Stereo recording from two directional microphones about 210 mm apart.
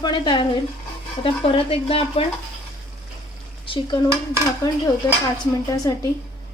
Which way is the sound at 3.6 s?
25° left (ahead or behind).